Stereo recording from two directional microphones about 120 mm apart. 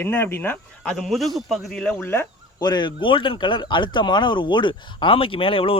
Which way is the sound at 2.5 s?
35° left (ahead or behind).